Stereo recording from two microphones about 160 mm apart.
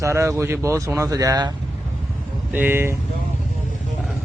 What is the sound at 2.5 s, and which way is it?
Speech, 10° right (ahead or behind).